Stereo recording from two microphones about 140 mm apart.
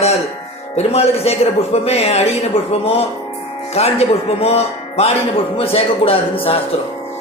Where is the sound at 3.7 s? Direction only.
45° left (ahead or behind).